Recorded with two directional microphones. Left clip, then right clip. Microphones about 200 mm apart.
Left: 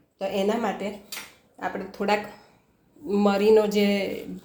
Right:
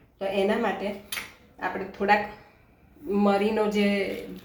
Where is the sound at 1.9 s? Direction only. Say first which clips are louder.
Right 3 dB; 55° left (ahead or behind).